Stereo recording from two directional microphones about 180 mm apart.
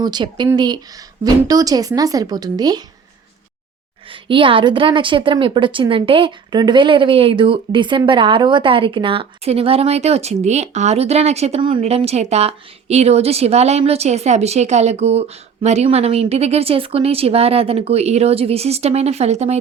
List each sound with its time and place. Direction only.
0.0 s a woman's voice: 25° right (ahead or behind)
4.1 s a woman's voice: 30° right (ahead or behind)